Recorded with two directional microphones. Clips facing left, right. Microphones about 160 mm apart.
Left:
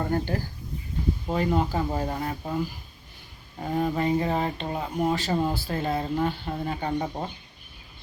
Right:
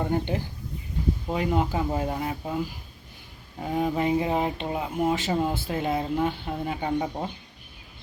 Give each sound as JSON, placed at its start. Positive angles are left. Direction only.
{"t": 0.0, "sound": "speech", "side_deg": -20}
{"t": 3.6, "sound": "speech", "side_deg": -10}
{"t": 5.1, "sound": "speech", "side_deg": -20}